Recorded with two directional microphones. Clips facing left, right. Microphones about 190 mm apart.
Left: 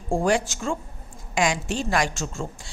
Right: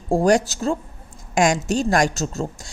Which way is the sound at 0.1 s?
40° right (ahead or behind).